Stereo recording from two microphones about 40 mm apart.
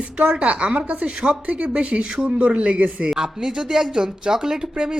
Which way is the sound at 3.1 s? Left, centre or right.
Centre.